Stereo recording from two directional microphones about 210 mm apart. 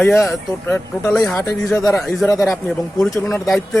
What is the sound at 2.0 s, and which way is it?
Speech, centre (ahead or behind).